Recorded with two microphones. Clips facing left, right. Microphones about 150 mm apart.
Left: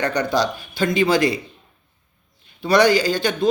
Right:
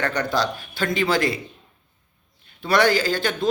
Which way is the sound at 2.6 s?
20° left (ahead or behind).